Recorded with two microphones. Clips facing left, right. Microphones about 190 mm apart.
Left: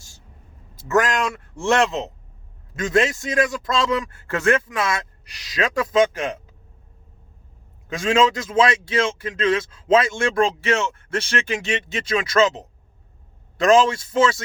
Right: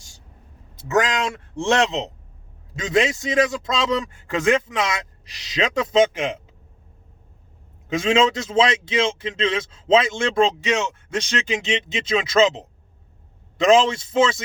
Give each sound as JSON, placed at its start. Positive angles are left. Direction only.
{"t": 0.8, "sound": "a man's voice", "side_deg": -20}
{"t": 7.9, "sound": "a man's voice", "side_deg": -20}
{"t": 13.6, "sound": "a man's voice", "side_deg": -20}